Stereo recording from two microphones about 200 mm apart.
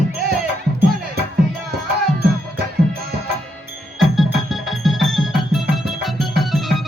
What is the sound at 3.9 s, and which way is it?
Music, centre (ahead or behind).